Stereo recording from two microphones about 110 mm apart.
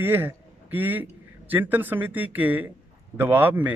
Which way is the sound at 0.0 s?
20° right (ahead or behind).